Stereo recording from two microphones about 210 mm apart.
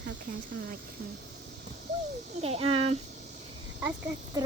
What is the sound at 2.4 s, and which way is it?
Speech, 30° right (ahead or behind).